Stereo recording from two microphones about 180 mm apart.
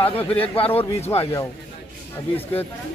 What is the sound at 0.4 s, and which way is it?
Speech, 30° left (ahead or behind).